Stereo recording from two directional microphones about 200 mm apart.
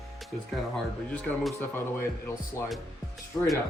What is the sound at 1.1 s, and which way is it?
A man's voice, 5° left (ahead or behind).